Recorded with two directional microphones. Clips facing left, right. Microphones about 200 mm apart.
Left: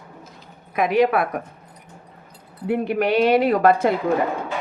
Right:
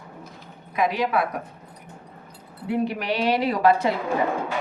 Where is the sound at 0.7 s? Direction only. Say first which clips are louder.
Left 5 dB; 55° left (ahead or behind).